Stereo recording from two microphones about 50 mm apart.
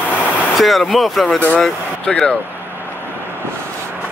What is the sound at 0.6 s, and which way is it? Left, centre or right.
Speech, centre.